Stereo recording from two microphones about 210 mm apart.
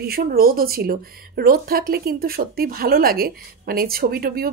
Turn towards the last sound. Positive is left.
turn(degrees=-45)  # may be behind; listen again after turning